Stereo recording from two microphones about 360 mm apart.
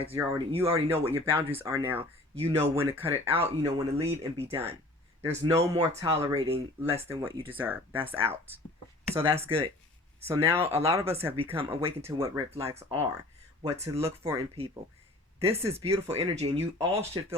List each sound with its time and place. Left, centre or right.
0.1 s speech: centre
2.4 s speech: centre
2.7 s speech: centre